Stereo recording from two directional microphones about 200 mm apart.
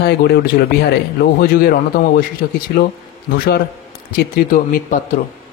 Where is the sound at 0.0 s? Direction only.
55° left (ahead or behind).